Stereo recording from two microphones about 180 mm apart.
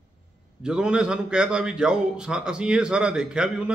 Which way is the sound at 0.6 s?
5° right (ahead or behind).